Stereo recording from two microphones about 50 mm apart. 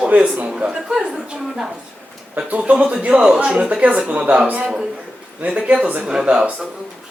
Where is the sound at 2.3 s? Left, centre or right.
Right.